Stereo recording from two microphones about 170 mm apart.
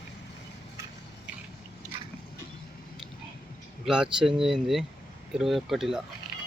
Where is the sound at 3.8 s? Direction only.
5° right (ahead or behind).